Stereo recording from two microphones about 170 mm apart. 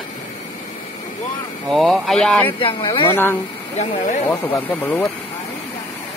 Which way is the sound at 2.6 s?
30° left (ahead or behind).